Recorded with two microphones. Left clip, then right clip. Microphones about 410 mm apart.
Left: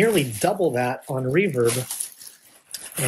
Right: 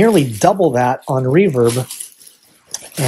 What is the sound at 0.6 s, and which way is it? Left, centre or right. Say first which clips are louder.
Speech: right 8 dB; right.